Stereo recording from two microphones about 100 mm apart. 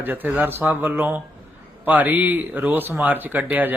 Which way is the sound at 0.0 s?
20° right (ahead or behind).